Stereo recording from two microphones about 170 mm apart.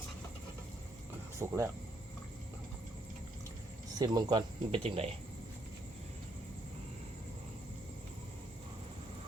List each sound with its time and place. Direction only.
1.4 s speech: 15° right (ahead or behind)
3.9 s speech: 20° right (ahead or behind)